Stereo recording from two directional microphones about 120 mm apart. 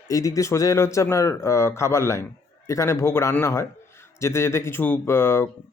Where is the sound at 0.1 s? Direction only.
25° left (ahead or behind).